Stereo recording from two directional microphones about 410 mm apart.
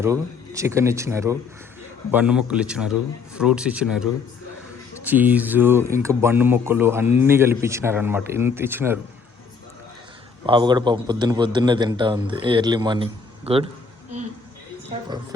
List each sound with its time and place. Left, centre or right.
0.0 s a man's voice: centre
10.4 s a man's voice: centre
14.8 s speech: centre